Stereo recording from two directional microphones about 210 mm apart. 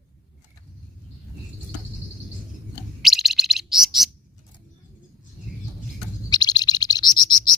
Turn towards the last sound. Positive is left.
turn(degrees=20)  # may be behind; listen again after turning